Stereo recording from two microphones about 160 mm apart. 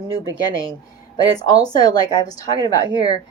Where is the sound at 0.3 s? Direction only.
25° left (ahead or behind).